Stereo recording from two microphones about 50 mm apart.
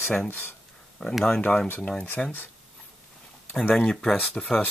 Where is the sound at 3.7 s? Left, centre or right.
Centre.